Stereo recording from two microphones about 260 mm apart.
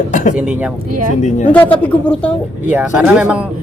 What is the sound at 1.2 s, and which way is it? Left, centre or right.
Chuckle, left.